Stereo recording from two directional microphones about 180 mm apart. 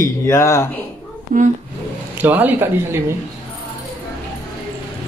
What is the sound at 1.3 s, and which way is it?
Speech, 50° right (ahead or behind).